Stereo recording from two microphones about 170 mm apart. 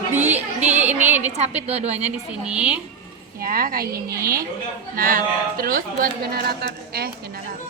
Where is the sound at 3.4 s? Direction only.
55° right (ahead or behind).